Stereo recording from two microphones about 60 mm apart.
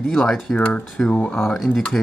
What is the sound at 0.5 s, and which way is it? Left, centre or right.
Speech, left.